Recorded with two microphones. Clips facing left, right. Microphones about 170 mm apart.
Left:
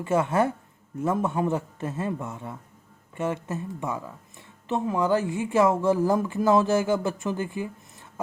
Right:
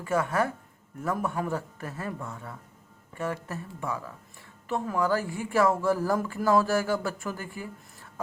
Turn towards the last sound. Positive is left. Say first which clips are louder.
# left 7 dB
turn(degrees=20)  # may be behind; listen again after turning